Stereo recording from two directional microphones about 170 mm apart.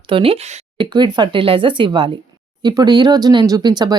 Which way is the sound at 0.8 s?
25° right (ahead or behind).